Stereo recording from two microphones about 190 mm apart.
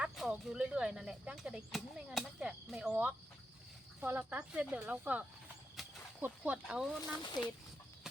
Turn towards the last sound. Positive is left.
turn(degrees=20)  # may be behind; listen again after turning